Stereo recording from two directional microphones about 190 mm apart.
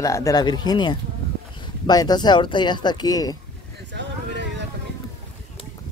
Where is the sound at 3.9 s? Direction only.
65° right (ahead or behind).